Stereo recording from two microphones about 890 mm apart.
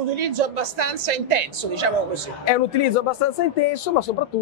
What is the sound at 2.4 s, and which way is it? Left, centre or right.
Speech, left.